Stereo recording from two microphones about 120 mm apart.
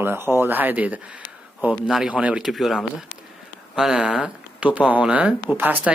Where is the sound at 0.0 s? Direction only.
20° right (ahead or behind).